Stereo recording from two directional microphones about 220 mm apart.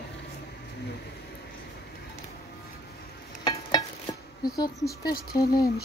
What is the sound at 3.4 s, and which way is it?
Stir, 15° left (ahead or behind).